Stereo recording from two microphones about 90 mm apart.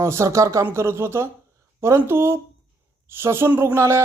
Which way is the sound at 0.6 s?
30° right (ahead or behind).